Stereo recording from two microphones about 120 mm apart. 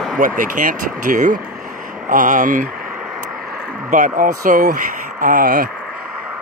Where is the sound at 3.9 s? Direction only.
90° right.